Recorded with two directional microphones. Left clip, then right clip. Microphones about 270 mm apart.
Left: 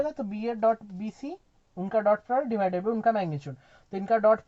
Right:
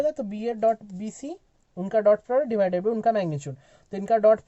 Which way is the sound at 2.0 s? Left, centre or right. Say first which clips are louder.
Right 5 dB; right.